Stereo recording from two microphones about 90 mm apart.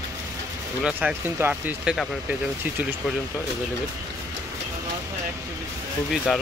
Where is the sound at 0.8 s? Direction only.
10° right (ahead or behind).